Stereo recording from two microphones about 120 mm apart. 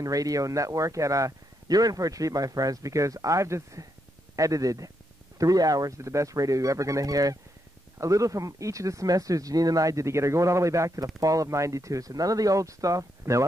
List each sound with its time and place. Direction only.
0.0 s a man's voice: 30° right (ahead or behind)